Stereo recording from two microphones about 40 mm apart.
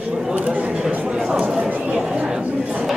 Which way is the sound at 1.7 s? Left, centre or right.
Right.